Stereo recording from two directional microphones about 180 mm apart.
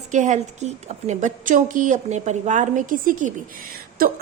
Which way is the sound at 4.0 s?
55° right (ahead or behind).